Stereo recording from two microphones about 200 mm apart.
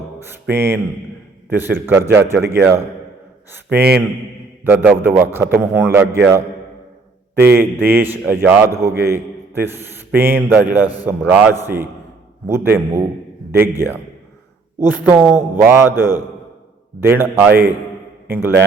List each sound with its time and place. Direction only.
0.5 s a man's voice: 10° right (ahead or behind)
4.6 s a man's voice: 10° right (ahead or behind)
16.0 s a man's voice: 20° left (ahead or behind)
17.0 s a man's voice: 10° right (ahead or behind)